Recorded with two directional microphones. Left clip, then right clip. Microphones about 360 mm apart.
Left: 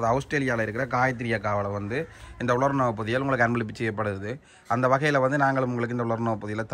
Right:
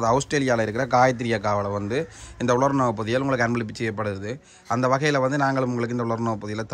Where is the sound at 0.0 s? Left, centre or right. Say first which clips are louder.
Right 3 dB; centre.